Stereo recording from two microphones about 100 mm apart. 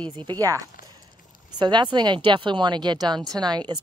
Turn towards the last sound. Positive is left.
turn(degrees=-45)  # may be behind; listen again after turning